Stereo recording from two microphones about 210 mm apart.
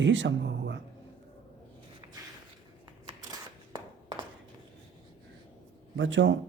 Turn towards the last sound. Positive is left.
turn(degrees=-60)  # may be behind; listen again after turning